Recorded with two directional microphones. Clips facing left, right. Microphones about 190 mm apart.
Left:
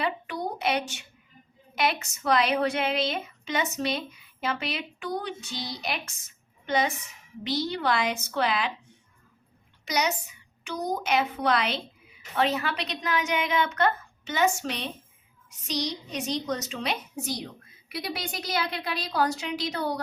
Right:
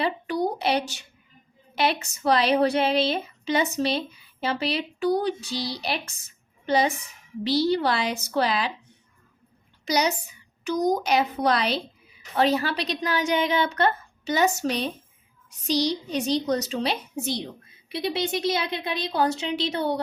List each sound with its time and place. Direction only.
0.0 s a sound: 35° right (ahead or behind)
1.7 s speech: 30° right (ahead or behind)
9.8 s a child's voice: 35° right (ahead or behind)